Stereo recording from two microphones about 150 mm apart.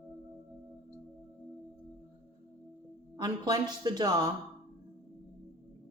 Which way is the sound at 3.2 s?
30° right (ahead or behind).